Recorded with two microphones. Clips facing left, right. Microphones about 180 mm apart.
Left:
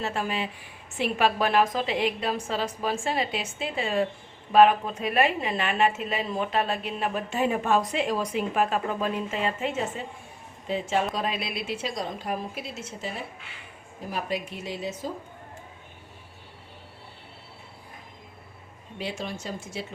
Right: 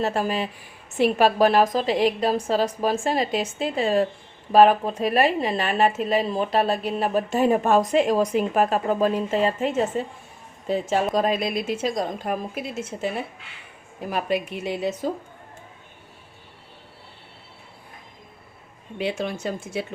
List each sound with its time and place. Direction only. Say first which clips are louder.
0.0 s a woman's voice: right 5 dB; 40° right (ahead or behind)
14.1 s speech: right 6 dB; 60° right (ahead or behind)
18.9 s speech: right 7 dB; 60° right (ahead or behind)